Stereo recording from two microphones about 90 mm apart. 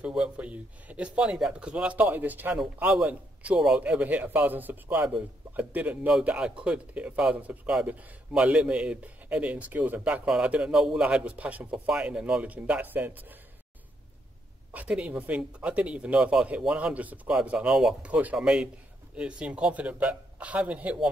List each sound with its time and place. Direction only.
0.0 s speech: 10° right (ahead or behind)
14.7 s speech: 15° right (ahead or behind)